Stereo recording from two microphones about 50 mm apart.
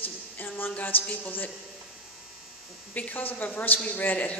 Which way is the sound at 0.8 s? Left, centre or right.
Left.